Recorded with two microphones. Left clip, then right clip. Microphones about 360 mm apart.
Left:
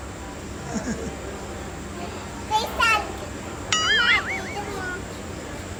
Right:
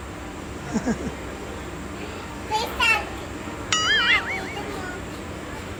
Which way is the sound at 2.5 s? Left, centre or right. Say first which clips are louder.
Even; centre.